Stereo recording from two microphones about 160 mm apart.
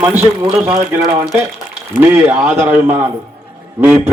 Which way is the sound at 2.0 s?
15° right (ahead or behind).